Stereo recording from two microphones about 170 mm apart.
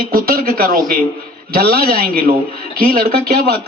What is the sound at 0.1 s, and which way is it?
Speech, 60° right (ahead or behind).